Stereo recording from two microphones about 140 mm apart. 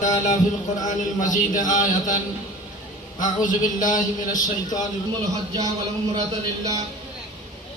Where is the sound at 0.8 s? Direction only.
65° left (ahead or behind).